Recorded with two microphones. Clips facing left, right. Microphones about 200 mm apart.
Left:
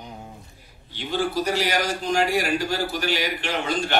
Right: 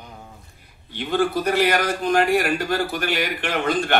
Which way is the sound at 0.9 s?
55° right (ahead or behind).